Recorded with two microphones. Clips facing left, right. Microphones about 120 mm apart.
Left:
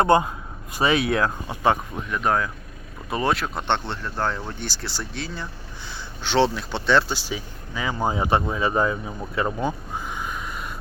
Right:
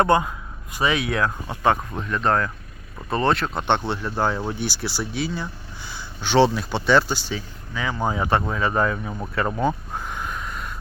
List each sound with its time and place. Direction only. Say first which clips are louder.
0.0 s speech: left 1 dB; 25° left (ahead or behind)
1.5 s speech: right 1 dB; 20° left (ahead or behind); by 7.3 s centre (ahead or behind)
7.3 s speech: right 1 dB; 20° left (ahead or behind)
10.0 s a sound: even; 5° left (ahead or behind)